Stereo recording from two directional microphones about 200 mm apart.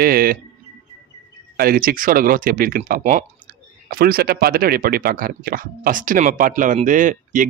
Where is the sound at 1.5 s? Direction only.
50° right (ahead or behind).